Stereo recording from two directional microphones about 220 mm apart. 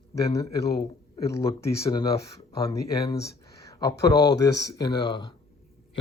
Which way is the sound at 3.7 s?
15° left (ahead or behind).